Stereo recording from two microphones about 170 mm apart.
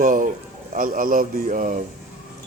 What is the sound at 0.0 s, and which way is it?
Speech, 50° right (ahead or behind).